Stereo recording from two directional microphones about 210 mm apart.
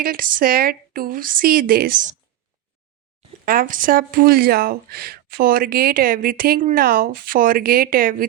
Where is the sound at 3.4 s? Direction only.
40° right (ahead or behind).